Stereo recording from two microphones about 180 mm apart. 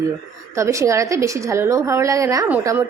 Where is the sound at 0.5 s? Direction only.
15° right (ahead or behind).